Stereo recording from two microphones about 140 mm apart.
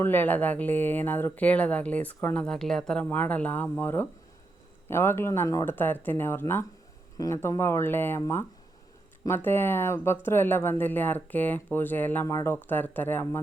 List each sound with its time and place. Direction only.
0.0 s speech: 15° left (ahead or behind)